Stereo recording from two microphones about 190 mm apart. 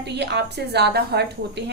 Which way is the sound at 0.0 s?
65° right (ahead or behind).